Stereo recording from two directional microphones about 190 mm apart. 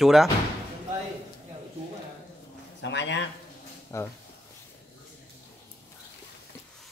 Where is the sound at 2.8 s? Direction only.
70° left (ahead or behind).